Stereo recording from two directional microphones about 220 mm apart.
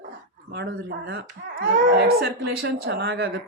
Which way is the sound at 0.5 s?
45° right (ahead or behind).